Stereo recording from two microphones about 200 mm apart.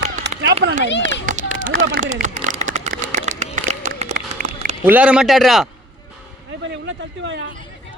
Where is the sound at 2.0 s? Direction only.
40° right (ahead or behind).